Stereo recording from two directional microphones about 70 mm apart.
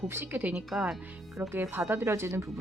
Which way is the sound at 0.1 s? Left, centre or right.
Right.